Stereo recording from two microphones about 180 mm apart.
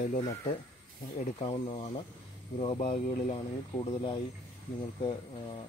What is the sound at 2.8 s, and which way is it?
Speech, 45° left (ahead or behind).